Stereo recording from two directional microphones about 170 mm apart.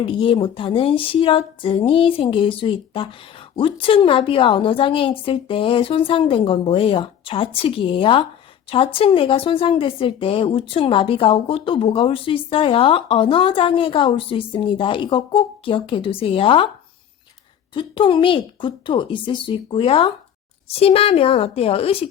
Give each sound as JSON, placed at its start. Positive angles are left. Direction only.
{"t": 0.0, "sound": "speech", "side_deg": 30}
{"t": 17.7, "sound": "a woman's voice", "side_deg": 30}